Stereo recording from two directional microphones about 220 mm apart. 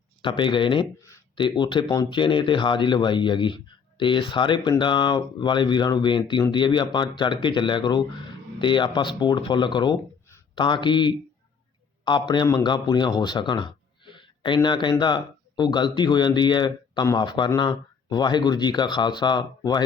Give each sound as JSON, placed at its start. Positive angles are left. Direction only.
{"t": 0.2, "sound": "speech", "side_deg": 20}